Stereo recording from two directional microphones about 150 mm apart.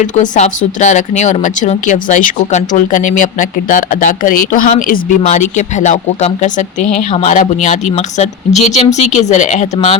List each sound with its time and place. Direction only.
0.0 s speech: 55° left (ahead or behind)